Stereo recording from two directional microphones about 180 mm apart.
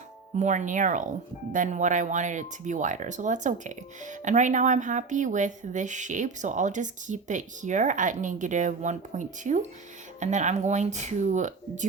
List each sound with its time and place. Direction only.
0.3 s speech: 40° right (ahead or behind)